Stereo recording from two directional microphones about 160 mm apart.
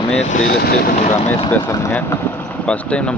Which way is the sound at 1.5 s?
20° left (ahead or behind).